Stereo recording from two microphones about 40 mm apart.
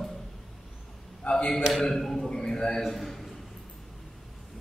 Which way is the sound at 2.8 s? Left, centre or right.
Centre.